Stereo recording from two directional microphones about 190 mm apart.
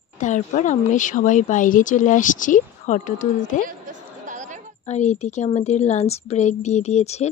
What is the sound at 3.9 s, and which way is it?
Chatter, 40° right (ahead or behind).